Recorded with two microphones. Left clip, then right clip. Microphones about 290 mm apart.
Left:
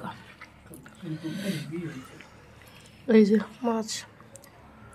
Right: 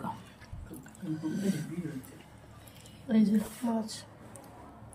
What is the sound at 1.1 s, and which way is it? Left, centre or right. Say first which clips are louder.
Speech: left 1 dB; centre.